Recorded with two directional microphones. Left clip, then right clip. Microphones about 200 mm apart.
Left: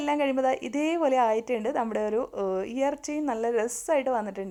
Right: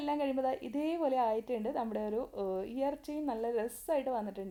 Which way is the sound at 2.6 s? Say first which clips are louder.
Left 8 dB; 15° left (ahead or behind).